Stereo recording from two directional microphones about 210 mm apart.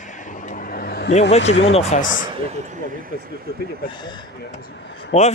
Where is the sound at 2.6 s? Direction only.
35° right (ahead or behind).